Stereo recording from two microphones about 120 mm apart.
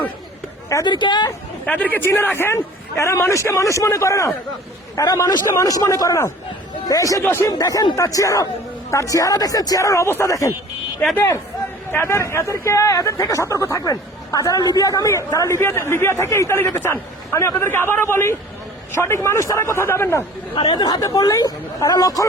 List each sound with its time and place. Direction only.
0.7 s speech: 25° left (ahead or behind)
0.9 s speech: 40° left (ahead or behind)
1.6 s speech: 15° left (ahead or behind)
11.9 s speech: 20° left (ahead or behind)
20.6 s speech: 35° left (ahead or behind)